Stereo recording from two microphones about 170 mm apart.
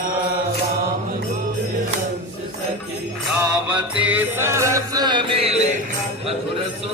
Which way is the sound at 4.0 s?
10° right (ahead or behind).